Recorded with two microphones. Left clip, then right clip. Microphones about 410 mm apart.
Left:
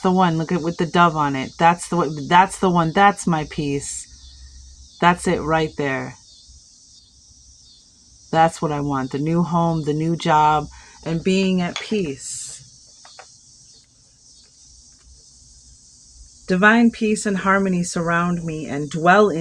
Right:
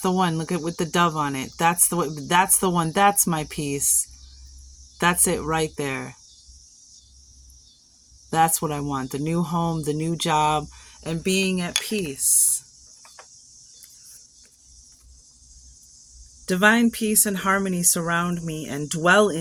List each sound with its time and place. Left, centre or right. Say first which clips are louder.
0.0 s speech: left 5 dB; right
4.9 s speech: left 5 dB; right
8.3 s speech: left 4 dB; right
16.5 s speech: left 3 dB; right